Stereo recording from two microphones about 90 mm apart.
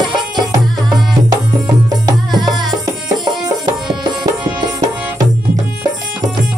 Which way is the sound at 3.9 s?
60° right (ahead or behind).